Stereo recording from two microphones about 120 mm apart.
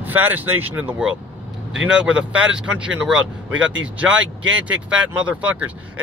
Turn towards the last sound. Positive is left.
turn(degrees=-10)  # may be behind; listen again after turning